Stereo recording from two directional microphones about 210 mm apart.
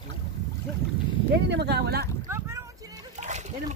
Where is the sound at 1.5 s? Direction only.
50° right (ahead or behind).